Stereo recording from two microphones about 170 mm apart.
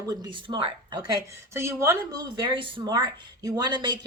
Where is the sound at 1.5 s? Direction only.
15° right (ahead or behind).